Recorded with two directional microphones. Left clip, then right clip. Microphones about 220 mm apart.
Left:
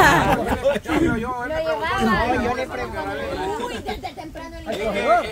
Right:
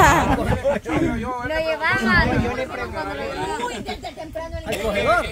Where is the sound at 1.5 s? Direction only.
50° right (ahead or behind).